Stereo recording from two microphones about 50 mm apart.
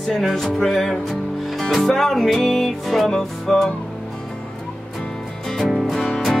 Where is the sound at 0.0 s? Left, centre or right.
Centre.